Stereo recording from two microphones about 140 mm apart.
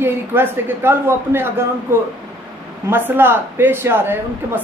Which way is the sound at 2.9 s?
15° right (ahead or behind).